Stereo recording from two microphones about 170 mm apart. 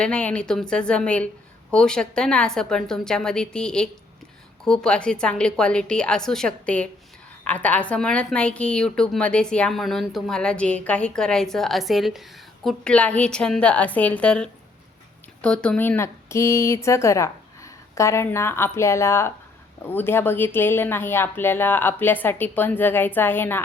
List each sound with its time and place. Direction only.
0.0 s a woman's voice: 5° left (ahead or behind)